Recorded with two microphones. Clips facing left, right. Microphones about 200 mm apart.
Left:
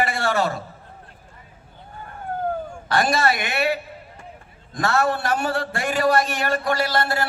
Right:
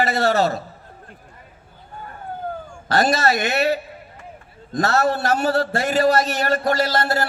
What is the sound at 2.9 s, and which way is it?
A man's voice, 40° right (ahead or behind).